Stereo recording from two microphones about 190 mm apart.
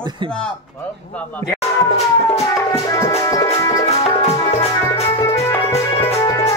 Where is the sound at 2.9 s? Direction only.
15° left (ahead or behind).